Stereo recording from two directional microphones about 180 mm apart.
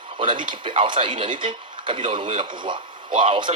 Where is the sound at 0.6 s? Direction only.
30° right (ahead or behind).